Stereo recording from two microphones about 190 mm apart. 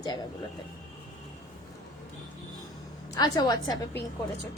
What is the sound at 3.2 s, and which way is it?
Speech, 20° left (ahead or behind).